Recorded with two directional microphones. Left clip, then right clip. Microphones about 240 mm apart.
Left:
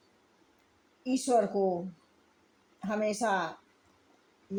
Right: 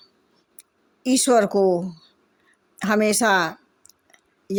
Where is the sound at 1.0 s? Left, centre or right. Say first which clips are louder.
Right 9 dB; right.